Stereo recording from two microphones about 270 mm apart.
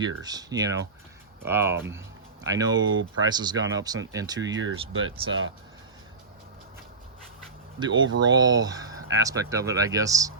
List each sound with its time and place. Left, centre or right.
0.0 s speech: centre
2.7 s speech: right
3.2 s speech: centre
4.4 s speech: right
5.2 s speech: centre
7.9 s speech: right
8.4 s speech: centre